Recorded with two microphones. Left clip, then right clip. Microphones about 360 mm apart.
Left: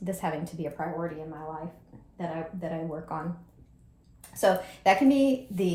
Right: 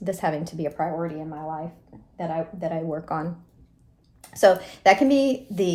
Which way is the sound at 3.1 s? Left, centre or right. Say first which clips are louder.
Right 7 dB; right.